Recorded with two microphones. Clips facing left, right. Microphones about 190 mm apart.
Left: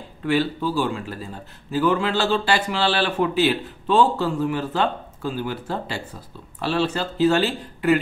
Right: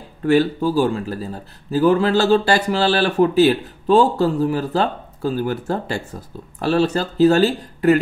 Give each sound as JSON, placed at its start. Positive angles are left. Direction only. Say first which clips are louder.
{"t": 0.2, "sound": "speech", "louder": "right 6 dB", "side_deg": -45}